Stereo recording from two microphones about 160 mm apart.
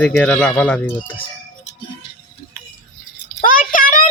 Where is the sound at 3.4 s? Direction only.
60° left (ahead or behind).